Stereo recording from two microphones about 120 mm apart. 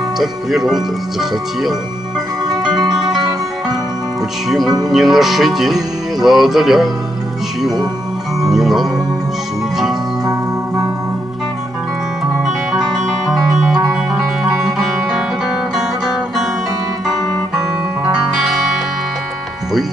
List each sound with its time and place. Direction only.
0.2 s speech: centre (ahead or behind)
2.7 s music: 5° right (ahead or behind)
4.6 s speech: 30° right (ahead or behind)
4.9 s speech: centre (ahead or behind)
8.4 s speech: 5° right (ahead or behind)
13.0 s music: 5° right (ahead or behind)